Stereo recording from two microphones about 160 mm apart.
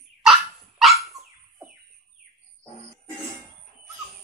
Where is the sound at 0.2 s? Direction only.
Centre (ahead or behind).